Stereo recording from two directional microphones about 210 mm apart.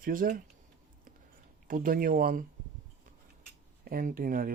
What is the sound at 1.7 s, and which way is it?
Speech, 40° right (ahead or behind).